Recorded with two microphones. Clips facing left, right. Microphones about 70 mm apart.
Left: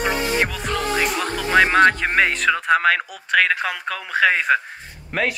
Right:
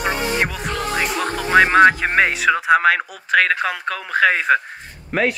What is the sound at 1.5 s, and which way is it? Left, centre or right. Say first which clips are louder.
Speech: right 3 dB; centre.